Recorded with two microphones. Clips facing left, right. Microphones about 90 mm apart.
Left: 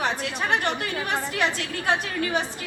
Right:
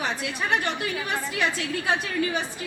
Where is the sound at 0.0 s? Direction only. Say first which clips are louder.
Left 2 dB; 55° left (ahead or behind).